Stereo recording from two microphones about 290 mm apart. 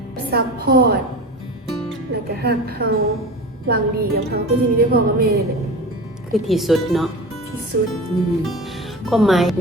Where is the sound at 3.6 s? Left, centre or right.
Right.